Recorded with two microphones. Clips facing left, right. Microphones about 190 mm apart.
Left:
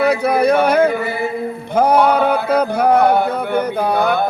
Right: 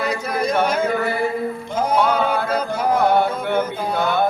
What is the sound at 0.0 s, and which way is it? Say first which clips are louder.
Yodeling: left 8 dB; 65° left (ahead or behind).